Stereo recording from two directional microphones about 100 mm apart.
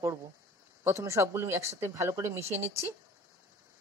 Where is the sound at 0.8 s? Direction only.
30° right (ahead or behind).